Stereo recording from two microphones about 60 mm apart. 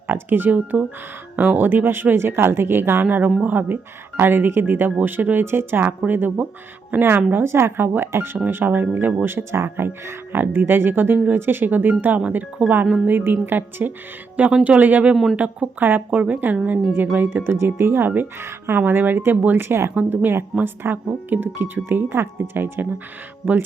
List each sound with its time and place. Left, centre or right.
0.1 s speech: right
3.0 s speech: right
7.3 s speech: right
9.2 s a woman's voice: right
15.1 s speech: centre
15.4 s a woman's voice: right